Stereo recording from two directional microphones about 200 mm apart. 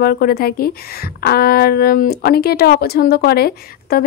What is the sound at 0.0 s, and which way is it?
A woman's voice, 50° left (ahead or behind).